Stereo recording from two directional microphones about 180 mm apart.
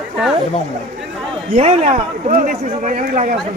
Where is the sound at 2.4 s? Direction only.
50° right (ahead or behind).